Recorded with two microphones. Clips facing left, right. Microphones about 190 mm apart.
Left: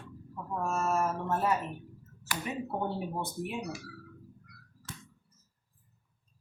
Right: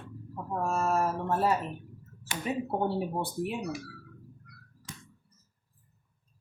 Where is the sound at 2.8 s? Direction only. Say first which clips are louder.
Right 4 dB; 30° right (ahead or behind).